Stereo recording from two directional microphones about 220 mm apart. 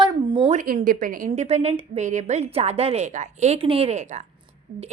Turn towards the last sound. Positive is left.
turn(degrees=-30)  # may be behind; listen again after turning